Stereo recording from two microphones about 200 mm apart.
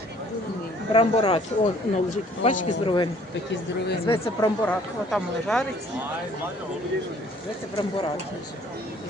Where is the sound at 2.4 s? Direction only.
40° left (ahead or behind).